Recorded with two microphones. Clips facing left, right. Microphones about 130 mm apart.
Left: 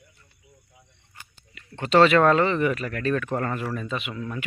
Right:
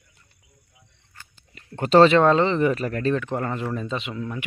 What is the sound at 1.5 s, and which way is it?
Speech, 40° right (ahead or behind).